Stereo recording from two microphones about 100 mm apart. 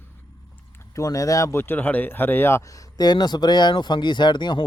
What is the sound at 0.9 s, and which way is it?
Speech, 35° left (ahead or behind).